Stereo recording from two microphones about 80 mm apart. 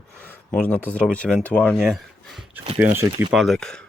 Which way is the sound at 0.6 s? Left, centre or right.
Left.